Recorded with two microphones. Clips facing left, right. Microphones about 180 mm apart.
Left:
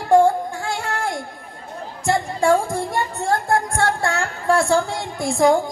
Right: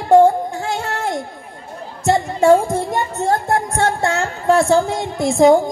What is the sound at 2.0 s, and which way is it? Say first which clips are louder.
Music: right 4 dB; 20° right (ahead or behind).